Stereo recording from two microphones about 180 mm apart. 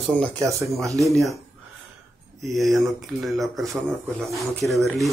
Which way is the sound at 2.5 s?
Centre (ahead or behind).